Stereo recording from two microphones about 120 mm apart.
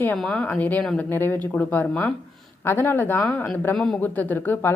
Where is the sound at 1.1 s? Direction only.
20° left (ahead or behind).